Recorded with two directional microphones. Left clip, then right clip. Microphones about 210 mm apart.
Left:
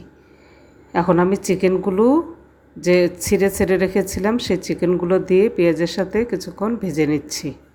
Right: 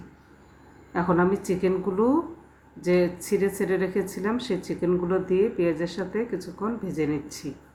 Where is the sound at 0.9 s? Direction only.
35° left (ahead or behind).